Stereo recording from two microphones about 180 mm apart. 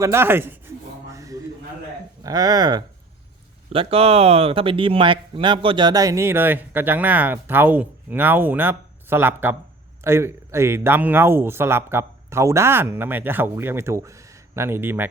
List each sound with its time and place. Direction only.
0.0 s speech: 15° right (ahead or behind)
1.1 s a sound: 20° right (ahead or behind)
2.2 s speech: 20° right (ahead or behind)